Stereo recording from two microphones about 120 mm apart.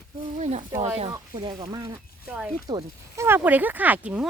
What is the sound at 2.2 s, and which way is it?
Speech, 10° right (ahead or behind).